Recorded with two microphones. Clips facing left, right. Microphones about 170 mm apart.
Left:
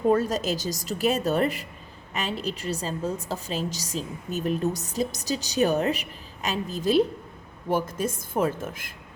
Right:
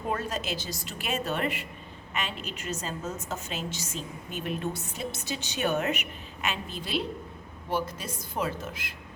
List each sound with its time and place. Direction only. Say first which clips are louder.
0.1 s a woman's voice: left 6 dB; 40° left (ahead or behind)